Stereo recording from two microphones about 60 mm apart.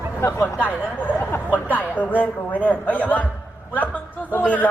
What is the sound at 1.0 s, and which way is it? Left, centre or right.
Speech, left.